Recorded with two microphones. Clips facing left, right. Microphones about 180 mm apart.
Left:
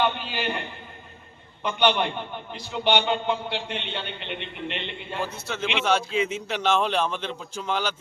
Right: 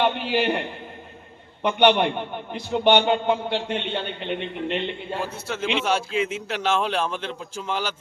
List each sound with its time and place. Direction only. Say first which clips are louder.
0.2 s a man's voice: right 7 dB; 65° right (ahead or behind)
1.6 s a man's voice: right 5 dB; 60° right (ahead or behind); by 5.2 s 40° right (ahead or behind)
5.2 s a man's voice: even; 5° right (ahead or behind)